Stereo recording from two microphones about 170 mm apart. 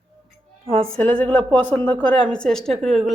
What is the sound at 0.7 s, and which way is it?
A woman's voice, 5° left (ahead or behind).